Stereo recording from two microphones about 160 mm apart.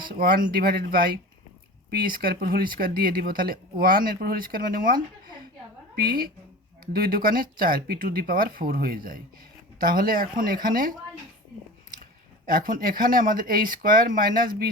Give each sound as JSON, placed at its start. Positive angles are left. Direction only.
{"t": 0.1, "sound": "speech", "side_deg": -65}
{"t": 6.0, "sound": "speech", "side_deg": -70}
{"t": 12.5, "sound": "speech", "side_deg": -60}